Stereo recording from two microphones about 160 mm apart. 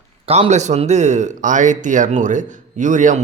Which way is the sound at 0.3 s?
40° right (ahead or behind).